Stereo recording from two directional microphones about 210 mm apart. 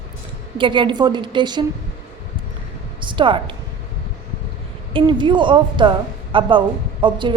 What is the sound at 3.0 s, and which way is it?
Speech, 25° right (ahead or behind).